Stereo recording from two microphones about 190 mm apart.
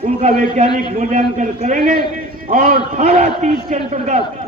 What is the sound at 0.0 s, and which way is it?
A man's voice, 40° right (ahead or behind).